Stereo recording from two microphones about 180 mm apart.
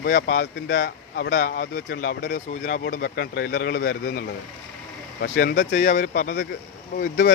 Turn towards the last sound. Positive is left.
turn(degrees=60)  # may be behind; listen again after turning